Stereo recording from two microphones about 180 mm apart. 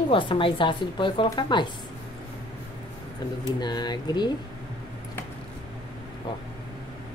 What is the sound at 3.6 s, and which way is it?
Speech, 25° left (ahead or behind).